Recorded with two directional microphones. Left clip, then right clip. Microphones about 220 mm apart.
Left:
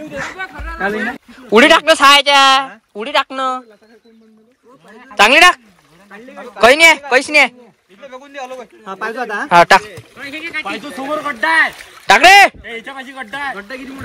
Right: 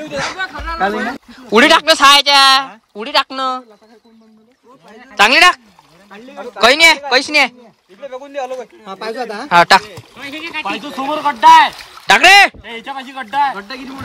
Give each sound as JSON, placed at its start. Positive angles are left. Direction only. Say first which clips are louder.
{"t": 0.4, "sound": "music", "louder": "right 3 dB", "side_deg": -35}
{"t": 1.3, "sound": "speech", "louder": "left 1 dB", "side_deg": -5}
{"t": 5.1, "sound": "speech", "louder": "left 1 dB", "side_deg": 0}
{"t": 6.0, "sound": "a sound", "louder": "right 2 dB", "side_deg": -40}
{"t": 6.6, "sound": "speech", "louder": "left 1 dB", "side_deg": 0}
{"t": 8.0, "sound": "speech", "louder": "right 5 dB", "side_deg": -40}
{"t": 8.8, "sound": "speech", "louder": "left 3 dB", "side_deg": 10}
{"t": 9.5, "sound": "speech", "louder": "even", "side_deg": -5}
{"t": 10.1, "sound": "speech", "louder": "left 1 dB", "side_deg": -45}
{"t": 12.1, "sound": "speech", "louder": "left 1 dB", "side_deg": -5}
{"t": 12.6, "sound": "a man's voice", "louder": "right 1 dB", "side_deg": -35}